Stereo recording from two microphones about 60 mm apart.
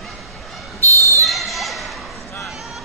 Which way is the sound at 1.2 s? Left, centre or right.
Centre.